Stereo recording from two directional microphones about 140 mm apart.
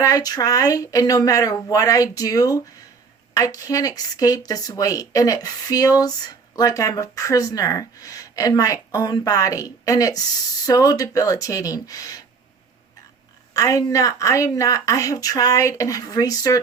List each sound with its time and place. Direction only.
0.0 s speech: 25° left (ahead or behind)
13.5 s speech: 25° left (ahead or behind)